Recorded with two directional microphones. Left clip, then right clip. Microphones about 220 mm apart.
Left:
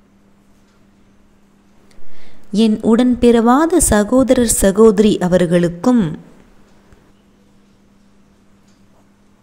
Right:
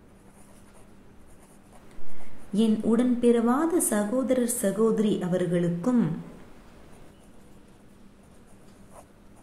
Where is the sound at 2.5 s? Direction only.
40° left (ahead or behind).